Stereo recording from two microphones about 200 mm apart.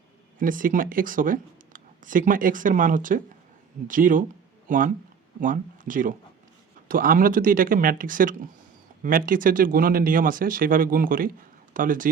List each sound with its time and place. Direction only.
0.3 s speech: 45° right (ahead or behind)